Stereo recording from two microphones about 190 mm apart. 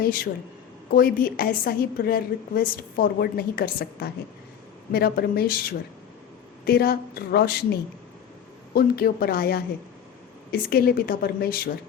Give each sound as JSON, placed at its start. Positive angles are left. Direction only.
{"t": 0.0, "sound": "a woman's voice", "side_deg": 50}